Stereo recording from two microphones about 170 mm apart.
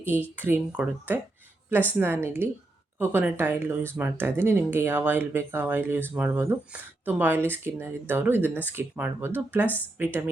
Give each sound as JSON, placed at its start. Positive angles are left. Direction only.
{"t": 0.0, "sound": "speech", "side_deg": -10}
{"t": 9.6, "sound": "speech", "side_deg": 10}
{"t": 10.0, "sound": "speech", "side_deg": -10}